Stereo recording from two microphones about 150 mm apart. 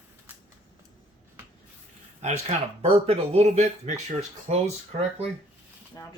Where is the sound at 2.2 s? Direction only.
45° right (ahead or behind).